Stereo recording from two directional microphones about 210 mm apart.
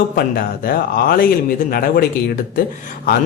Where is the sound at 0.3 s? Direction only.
45° left (ahead or behind).